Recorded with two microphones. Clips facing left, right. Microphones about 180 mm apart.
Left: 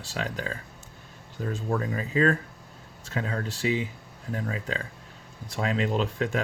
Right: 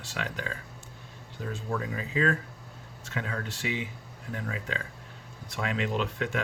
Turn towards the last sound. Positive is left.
turn(degrees=35)  # may be behind; listen again after turning